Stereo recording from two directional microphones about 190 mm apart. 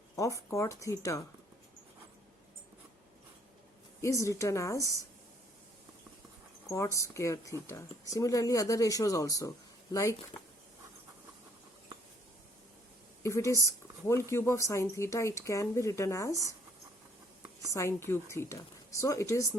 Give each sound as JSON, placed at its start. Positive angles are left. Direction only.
{"t": 0.2, "sound": "speech", "side_deg": 15}
{"t": 4.0, "sound": "speech", "side_deg": 15}
{"t": 6.7, "sound": "speech", "side_deg": 15}
{"t": 13.2, "sound": "speech", "side_deg": 15}
{"t": 17.7, "sound": "speech", "side_deg": 15}